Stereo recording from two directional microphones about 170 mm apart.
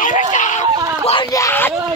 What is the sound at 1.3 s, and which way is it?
Speech, 15° left (ahead or behind).